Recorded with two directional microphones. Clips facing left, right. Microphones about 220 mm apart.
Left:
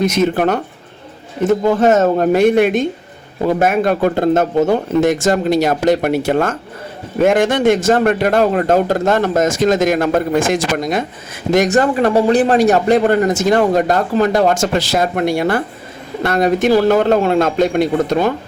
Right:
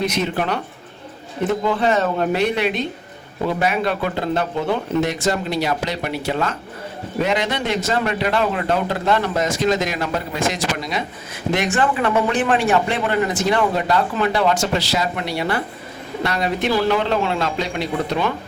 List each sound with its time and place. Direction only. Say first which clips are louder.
0.0 s a man's voice: left 7 dB; 45° left (ahead or behind)
1.6 s a man's voice: left 8 dB; 45° left (ahead or behind)